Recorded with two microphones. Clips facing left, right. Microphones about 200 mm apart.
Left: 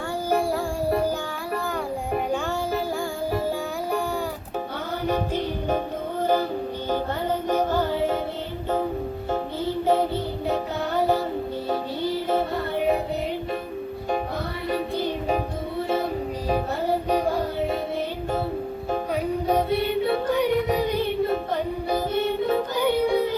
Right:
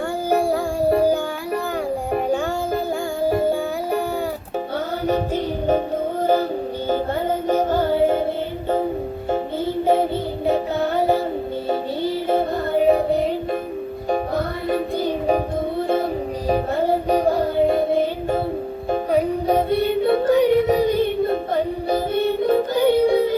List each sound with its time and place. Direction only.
0.4 s music: 55° right (ahead or behind)
5.0 s music: 45° right (ahead or behind)
7.4 s music: 55° right (ahead or behind)
9.8 s music: 55° right (ahead or behind)
12.9 s music: 40° right (ahead or behind)
16.5 s music: 45° right (ahead or behind)